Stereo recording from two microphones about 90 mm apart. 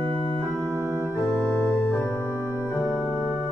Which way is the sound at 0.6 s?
30° right (ahead or behind).